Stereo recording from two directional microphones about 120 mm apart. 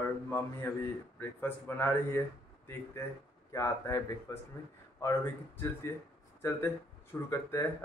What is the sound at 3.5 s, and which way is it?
Speech, 25° left (ahead or behind).